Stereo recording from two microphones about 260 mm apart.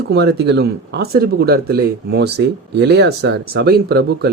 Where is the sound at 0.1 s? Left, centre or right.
Right.